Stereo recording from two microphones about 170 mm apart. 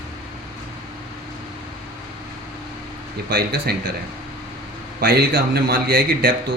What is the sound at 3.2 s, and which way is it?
Speech, 65° right (ahead or behind).